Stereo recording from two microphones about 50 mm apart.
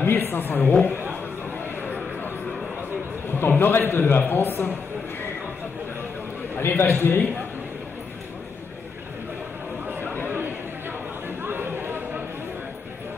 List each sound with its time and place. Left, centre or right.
0.0 s a man's voice: left
3.3 s a man's voice: left
6.5 s a man's voice: left
10.2 s chatter: right